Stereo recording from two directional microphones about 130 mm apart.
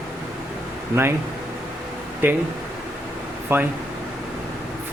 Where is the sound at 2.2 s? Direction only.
15° right (ahead or behind).